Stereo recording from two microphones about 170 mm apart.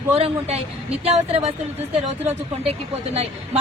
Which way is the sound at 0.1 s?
35° right (ahead or behind).